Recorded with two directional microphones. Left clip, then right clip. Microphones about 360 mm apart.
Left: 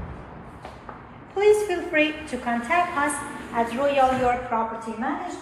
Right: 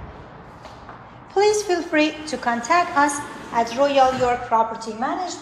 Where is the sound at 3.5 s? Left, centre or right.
Centre.